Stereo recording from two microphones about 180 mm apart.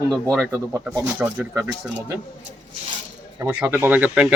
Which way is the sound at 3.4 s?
15° right (ahead or behind).